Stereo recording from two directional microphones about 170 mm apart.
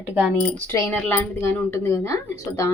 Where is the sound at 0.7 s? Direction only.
10° left (ahead or behind).